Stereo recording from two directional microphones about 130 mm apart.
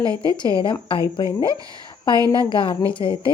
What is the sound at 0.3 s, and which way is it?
A woman's voice, 35° left (ahead or behind).